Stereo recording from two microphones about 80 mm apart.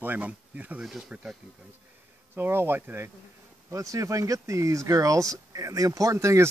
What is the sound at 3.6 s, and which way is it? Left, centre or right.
Speech, right.